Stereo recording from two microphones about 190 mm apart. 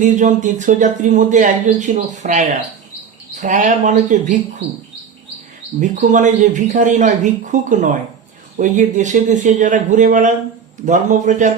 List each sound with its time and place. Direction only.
0.0 s speech: 40° right (ahead or behind)
5.8 s speech: 40° right (ahead or behind)